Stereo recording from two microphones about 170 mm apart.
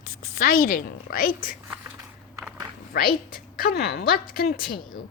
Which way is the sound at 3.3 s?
65° left (ahead or behind).